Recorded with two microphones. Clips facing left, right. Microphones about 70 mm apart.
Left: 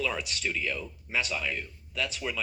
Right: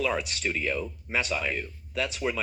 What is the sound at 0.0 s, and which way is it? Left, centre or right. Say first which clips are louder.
Speech: right 3 dB; right.